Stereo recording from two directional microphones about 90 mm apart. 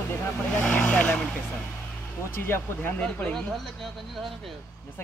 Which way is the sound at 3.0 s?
10° left (ahead or behind).